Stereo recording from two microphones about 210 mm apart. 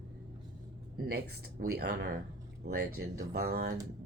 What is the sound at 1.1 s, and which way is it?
Speech, 45° right (ahead or behind).